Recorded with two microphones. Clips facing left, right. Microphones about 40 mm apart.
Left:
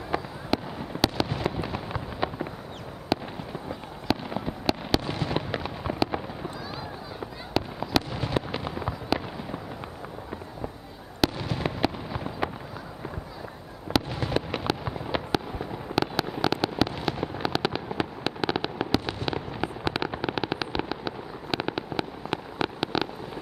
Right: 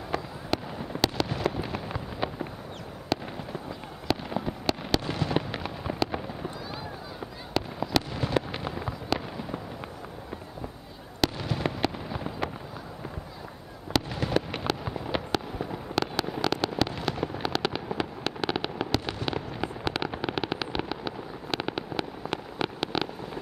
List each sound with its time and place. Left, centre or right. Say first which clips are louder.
0.1 s fireworks: left 2 dB; centre
7.5 s fireworks: left 1 dB; centre
11.1 s fireworks: left 2 dB; centre
13.9 s fireworks: left 2 dB; centre
14.6 s fireworks: left 1 dB; centre